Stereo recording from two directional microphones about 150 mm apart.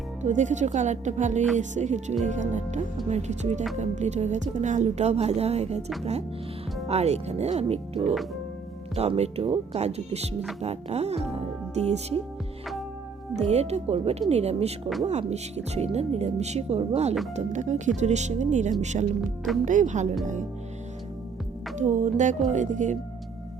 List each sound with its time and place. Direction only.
0.2 s speech: 55° right (ahead or behind)
6.8 s speech: 45° right (ahead or behind)
13.3 s speech: 45° right (ahead or behind)
21.8 s speech: 50° right (ahead or behind)